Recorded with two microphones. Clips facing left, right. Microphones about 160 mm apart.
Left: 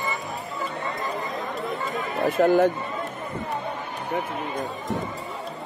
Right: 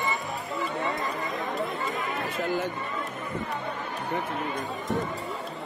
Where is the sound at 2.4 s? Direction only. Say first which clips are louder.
Left 11 dB; 45° left (ahead or behind).